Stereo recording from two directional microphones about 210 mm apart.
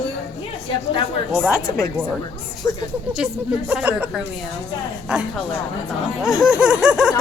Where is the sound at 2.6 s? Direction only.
15° left (ahead or behind).